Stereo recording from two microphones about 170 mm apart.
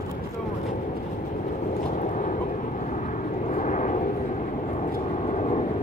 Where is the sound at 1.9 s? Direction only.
45° left (ahead or behind).